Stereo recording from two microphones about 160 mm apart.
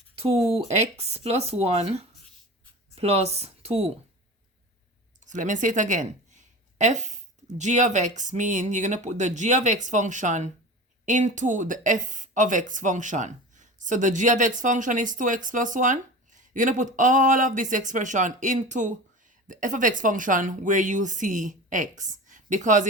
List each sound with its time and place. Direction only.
0.2 s speech: 35° right (ahead or behind)
5.2 s speech: 50° right (ahead or behind)